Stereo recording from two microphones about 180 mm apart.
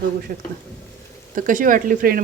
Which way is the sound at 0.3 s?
50° right (ahead or behind).